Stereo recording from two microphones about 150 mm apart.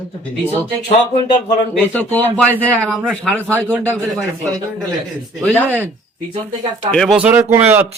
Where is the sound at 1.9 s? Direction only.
10° left (ahead or behind).